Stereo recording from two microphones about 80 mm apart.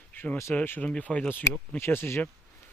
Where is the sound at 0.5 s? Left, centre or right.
Left.